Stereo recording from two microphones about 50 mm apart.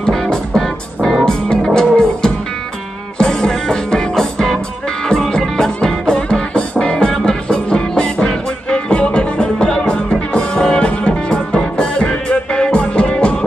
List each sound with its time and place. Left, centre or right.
0.0 s music: centre